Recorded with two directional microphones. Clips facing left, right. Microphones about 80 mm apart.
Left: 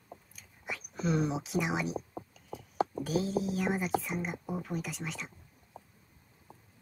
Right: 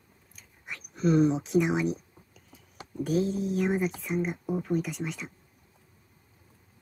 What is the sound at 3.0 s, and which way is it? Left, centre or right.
Speech, centre.